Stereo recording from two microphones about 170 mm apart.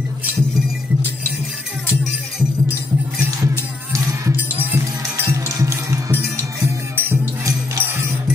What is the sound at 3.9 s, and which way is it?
Music, 15° right (ahead or behind).